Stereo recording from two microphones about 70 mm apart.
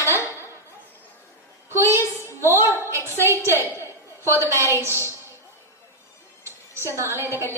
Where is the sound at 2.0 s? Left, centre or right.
Left.